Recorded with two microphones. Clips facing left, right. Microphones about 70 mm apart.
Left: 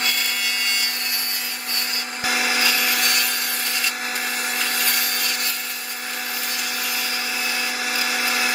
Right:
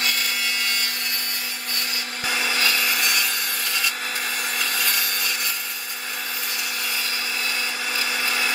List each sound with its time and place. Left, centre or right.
2.2 s wood: centre
4.6 s wood: left
7.9 s blender: centre